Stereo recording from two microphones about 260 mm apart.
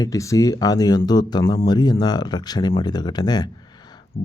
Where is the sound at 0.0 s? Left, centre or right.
Centre.